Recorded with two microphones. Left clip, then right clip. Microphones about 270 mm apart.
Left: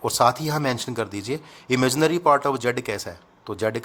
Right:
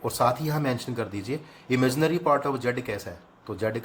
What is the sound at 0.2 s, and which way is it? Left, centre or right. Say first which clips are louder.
A man's voice: left 4 dB; left.